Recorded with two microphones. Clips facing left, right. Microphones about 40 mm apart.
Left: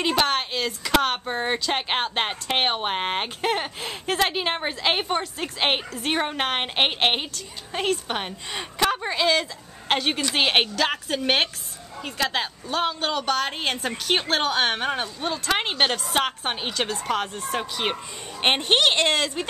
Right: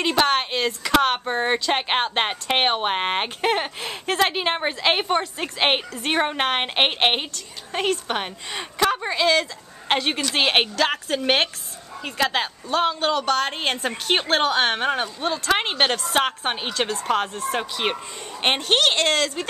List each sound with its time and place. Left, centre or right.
0.0 s a woman's voice: centre
18.6 s a woman's voice: centre